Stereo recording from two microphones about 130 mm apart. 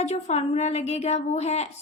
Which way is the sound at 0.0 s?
60° left (ahead or behind).